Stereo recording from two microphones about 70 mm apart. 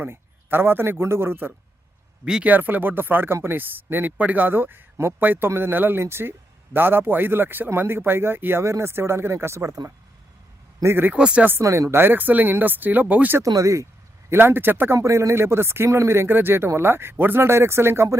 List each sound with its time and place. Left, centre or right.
0.0 s speech: right
2.2 s speech: centre
2.5 s speech: right
10.8 s speech: right
11.1 s speech: centre
11.6 s speech: right
13.4 s speech: right
14.3 s speech: right
14.9 s speech: right